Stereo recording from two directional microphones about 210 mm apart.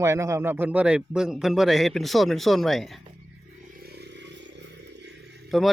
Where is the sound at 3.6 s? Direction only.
45° right (ahead or behind).